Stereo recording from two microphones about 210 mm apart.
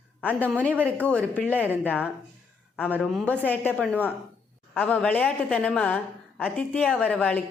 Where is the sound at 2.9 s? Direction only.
Centre (ahead or behind).